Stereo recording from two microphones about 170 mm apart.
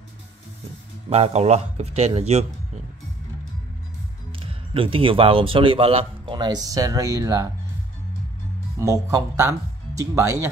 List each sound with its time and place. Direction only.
1.1 s speech: 40° right (ahead or behind)
4.3 s speech: 30° right (ahead or behind)
8.7 s speech: 20° right (ahead or behind)